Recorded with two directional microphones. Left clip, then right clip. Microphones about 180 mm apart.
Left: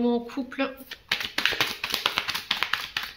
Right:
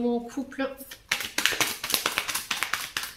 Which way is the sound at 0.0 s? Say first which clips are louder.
Left 2 dB; 20° left (ahead or behind).